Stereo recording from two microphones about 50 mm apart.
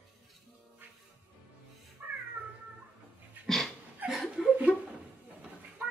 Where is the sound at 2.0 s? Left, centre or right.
Right.